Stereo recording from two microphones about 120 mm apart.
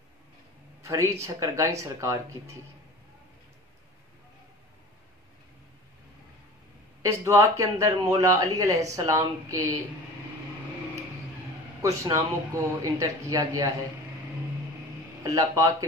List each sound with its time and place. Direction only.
0.8 s speech: 25° right (ahead or behind)
7.0 s speech: 25° right (ahead or behind)
11.8 s speech: 25° right (ahead or behind)
15.2 s speech: 30° right (ahead or behind)